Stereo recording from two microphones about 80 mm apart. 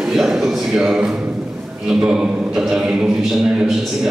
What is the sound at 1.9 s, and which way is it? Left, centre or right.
A man's voice, centre.